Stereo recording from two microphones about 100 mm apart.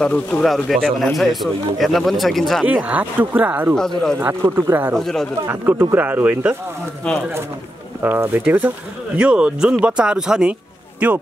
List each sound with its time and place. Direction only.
0.0 s speech: 10° left (ahead or behind)
2.6 s speech: 15° right (ahead or behind)
4.9 s speech: 5° left (ahead or behind)
5.5 s speech: 20° right (ahead or behind)
7.0 s speech: 10° left (ahead or behind)
8.0 s speech: 20° right (ahead or behind)